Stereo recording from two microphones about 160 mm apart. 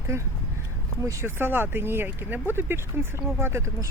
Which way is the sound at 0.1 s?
15° right (ahead or behind).